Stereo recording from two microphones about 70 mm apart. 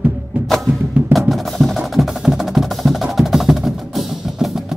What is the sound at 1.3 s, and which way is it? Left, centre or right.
Music, centre.